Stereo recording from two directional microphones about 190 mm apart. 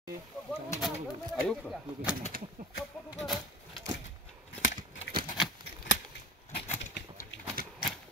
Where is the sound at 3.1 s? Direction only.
Centre (ahead or behind).